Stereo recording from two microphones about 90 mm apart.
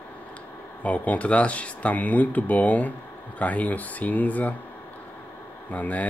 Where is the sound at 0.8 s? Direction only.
15° left (ahead or behind).